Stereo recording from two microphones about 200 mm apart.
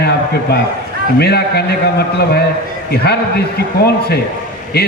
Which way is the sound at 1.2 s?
55° left (ahead or behind).